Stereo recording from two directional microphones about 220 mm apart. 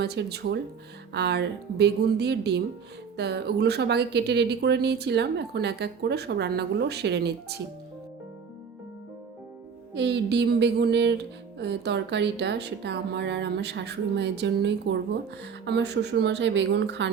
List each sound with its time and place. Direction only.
0.0 s speech: 50° right (ahead or behind)
9.9 s speech: 50° right (ahead or behind)